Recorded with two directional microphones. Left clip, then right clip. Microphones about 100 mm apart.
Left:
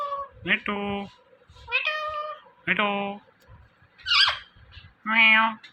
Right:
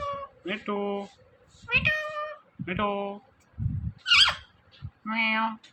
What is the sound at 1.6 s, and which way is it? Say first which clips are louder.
Meow: right 1 dB; 30° right (ahead or behind).